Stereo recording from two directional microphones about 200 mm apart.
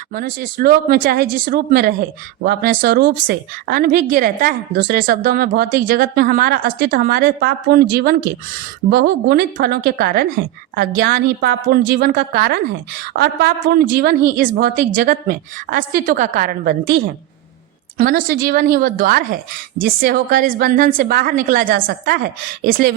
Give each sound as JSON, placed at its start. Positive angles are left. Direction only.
{"t": 0.1, "sound": "a woman's voice", "side_deg": -45}